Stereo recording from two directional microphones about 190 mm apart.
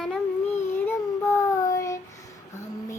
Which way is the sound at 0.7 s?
15° left (ahead or behind).